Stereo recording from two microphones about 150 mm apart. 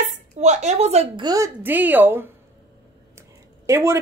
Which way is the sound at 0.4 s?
50° right (ahead or behind).